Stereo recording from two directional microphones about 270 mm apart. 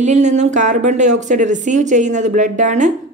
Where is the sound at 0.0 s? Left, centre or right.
Right.